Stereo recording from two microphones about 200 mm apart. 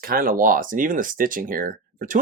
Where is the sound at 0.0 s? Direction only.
45° right (ahead or behind).